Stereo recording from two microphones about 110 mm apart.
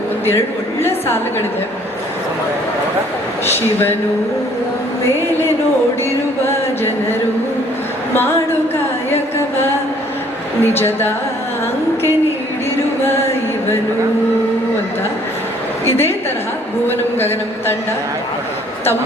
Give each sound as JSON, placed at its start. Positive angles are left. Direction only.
{"t": 0.8, "sound": "a woman's voice", "side_deg": 20}
{"t": 6.4, "sound": "speech", "side_deg": 20}
{"t": 10.6, "sound": "speech", "side_deg": 20}
{"t": 17.2, "sound": "speech", "side_deg": 20}